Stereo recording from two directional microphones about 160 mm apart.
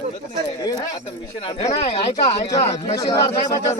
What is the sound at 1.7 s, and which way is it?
Speech, 40° left (ahead or behind).